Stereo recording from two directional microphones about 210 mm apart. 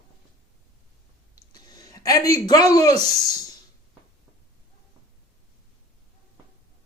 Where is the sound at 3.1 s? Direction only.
15° left (ahead or behind).